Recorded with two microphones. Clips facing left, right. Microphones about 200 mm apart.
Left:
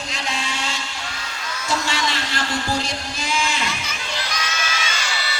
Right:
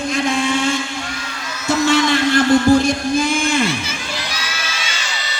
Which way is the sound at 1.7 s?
50° right (ahead or behind).